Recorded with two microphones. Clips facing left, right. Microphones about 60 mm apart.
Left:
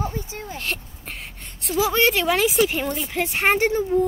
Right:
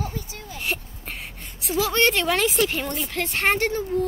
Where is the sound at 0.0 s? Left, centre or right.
Left.